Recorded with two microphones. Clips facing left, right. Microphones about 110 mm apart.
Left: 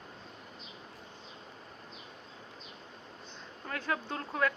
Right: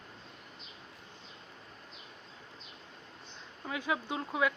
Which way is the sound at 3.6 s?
10° right (ahead or behind).